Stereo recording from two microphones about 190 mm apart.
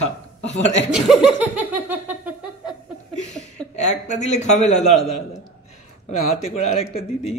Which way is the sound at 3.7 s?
40° left (ahead or behind).